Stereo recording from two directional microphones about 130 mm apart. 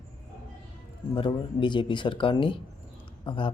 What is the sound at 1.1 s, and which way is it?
Speech, 35° left (ahead or behind).